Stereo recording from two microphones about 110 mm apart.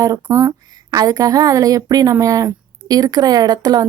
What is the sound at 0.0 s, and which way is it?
Speech, 30° right (ahead or behind).